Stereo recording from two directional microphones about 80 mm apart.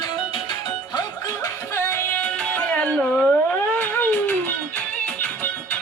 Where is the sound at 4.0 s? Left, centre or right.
Left.